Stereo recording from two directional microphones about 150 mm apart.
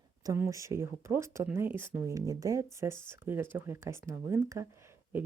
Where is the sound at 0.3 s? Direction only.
20° right (ahead or behind).